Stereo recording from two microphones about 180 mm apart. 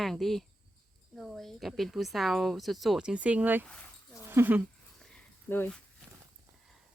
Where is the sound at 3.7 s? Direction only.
5° left (ahead or behind).